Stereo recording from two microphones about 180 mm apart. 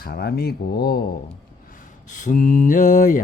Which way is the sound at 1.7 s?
45° left (ahead or behind).